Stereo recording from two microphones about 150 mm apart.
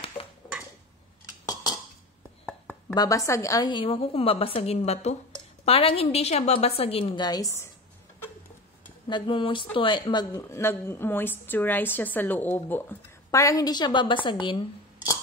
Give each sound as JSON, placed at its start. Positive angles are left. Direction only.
{"t": 1.5, "sound": "dishes", "side_deg": 25}
{"t": 2.9, "sound": "a woman's voice", "side_deg": 25}
{"t": 9.1, "sound": "speech", "side_deg": 35}